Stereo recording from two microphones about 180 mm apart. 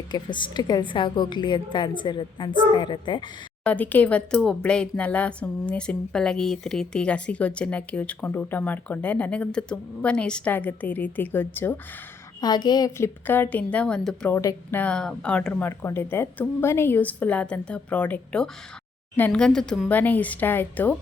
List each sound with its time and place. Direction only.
0.1 s a woman's voice: 25° left (ahead or behind)
3.6 s speech: 10° left (ahead or behind)
12.4 s a woman's voice: 25° left (ahead or behind)
13.2 s speech: 10° left (ahead or behind)